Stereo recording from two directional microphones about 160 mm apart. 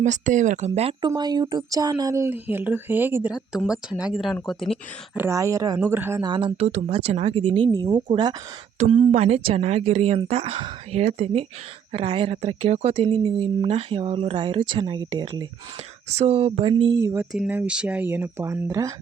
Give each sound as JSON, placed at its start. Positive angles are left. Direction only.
{"t": 0.0, "sound": "speech", "side_deg": -50}
{"t": 0.7, "sound": "speech", "side_deg": -35}
{"t": 5.1, "sound": "speech", "side_deg": -15}
{"t": 6.2, "sound": "speech", "side_deg": -30}
{"t": 6.7, "sound": "speech", "side_deg": -45}
{"t": 17.0, "sound": "speech", "side_deg": -20}